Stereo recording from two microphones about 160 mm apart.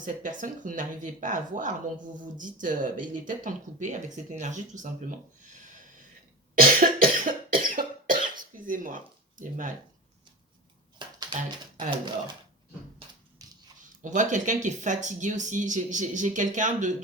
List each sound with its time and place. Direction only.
0.0 s speech: 55° right (ahead or behind)
6.6 s cough: 65° right (ahead or behind)
9.4 s speech: 55° right (ahead or behind)
10.9 s a sound: 30° right (ahead or behind)
13.4 s dog: 20° right (ahead or behind)
14.0 s speech: 50° right (ahead or behind)